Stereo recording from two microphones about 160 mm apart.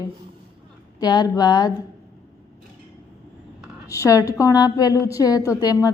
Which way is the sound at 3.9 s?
20° left (ahead or behind).